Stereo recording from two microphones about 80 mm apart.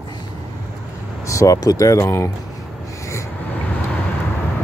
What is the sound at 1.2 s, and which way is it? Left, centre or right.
Speech, left.